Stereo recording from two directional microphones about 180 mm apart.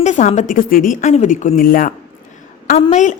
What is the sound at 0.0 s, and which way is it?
A woman's voice, 40° left (ahead or behind).